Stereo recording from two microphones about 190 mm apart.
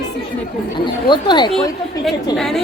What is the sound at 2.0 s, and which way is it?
Speech, centre (ahead or behind).